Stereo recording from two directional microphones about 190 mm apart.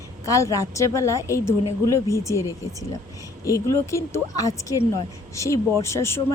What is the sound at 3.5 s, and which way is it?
A woman's voice, 15° left (ahead or behind).